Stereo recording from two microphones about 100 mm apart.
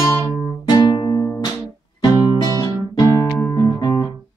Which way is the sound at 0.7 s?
45° left (ahead or behind).